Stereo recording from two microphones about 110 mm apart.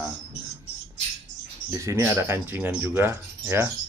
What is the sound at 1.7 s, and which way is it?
Speech, 25° right (ahead or behind).